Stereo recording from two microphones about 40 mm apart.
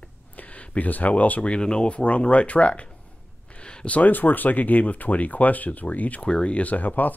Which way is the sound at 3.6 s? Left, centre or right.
Left.